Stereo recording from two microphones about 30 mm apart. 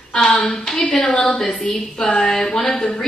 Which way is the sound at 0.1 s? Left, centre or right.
Left.